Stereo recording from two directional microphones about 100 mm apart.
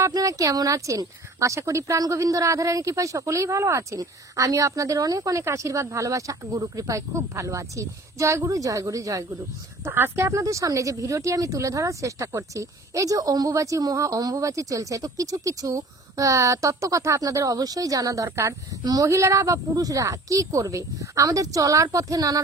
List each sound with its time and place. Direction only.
0.0 s speech: 35° right (ahead or behind)
9.8 s speech: 25° right (ahead or behind)